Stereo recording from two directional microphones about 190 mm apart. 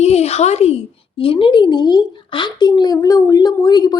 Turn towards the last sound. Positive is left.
turn(degrees=20)  # may be behind; listen again after turning